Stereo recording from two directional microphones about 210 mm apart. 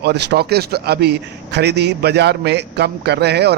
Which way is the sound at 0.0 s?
50° right (ahead or behind).